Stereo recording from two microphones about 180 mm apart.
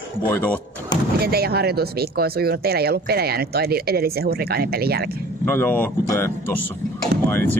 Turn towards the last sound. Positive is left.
turn(degrees=15)  # may be behind; listen again after turning